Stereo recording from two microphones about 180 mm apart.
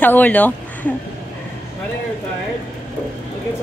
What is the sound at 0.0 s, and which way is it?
Speech, 10° left (ahead or behind).